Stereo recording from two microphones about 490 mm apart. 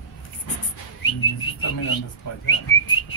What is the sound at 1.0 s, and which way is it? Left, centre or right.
Whistling, left.